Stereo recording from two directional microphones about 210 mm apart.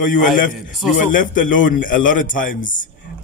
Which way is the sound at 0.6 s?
Centre (ahead or behind).